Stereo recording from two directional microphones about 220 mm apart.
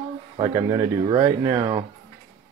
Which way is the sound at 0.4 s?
15° right (ahead or behind).